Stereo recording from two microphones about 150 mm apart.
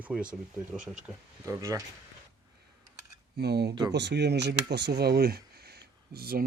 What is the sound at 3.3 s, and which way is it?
Speech, 90° right.